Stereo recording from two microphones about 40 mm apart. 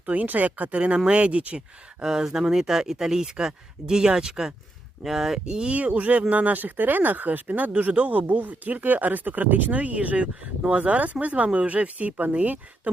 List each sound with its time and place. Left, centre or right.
0.0 s speech: right
2.0 s speech: centre
5.5 s speech: right